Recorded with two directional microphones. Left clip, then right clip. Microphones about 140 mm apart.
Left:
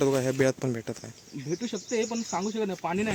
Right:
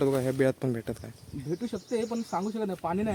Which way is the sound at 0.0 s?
Centre (ahead or behind).